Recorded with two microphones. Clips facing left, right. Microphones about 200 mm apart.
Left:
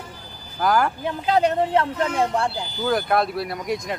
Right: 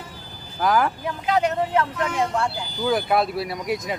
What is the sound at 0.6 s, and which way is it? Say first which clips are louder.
Speech: even; centre (ahead or behind).